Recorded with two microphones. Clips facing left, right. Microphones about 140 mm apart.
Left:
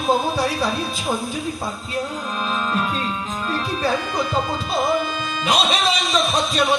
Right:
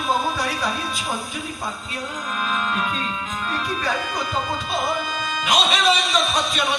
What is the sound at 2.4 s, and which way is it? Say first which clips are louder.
Speech: left 1 dB; 35° left (ahead or behind).